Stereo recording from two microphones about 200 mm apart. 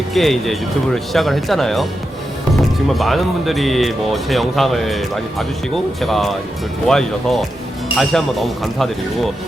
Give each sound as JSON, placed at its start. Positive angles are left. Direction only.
{"t": 0.1, "sound": "speech", "side_deg": 0}